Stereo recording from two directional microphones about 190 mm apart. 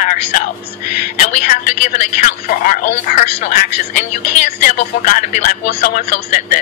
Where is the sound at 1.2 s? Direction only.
40° left (ahead or behind).